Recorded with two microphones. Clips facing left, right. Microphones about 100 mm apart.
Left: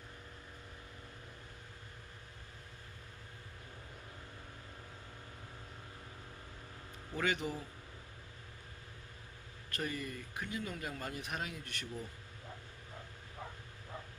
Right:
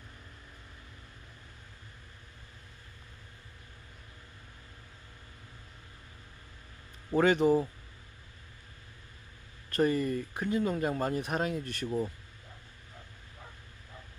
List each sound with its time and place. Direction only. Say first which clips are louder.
7.2 s speech: right 12 dB; 40° right (ahead or behind)
9.7 s speech: right 13 dB; 40° right (ahead or behind)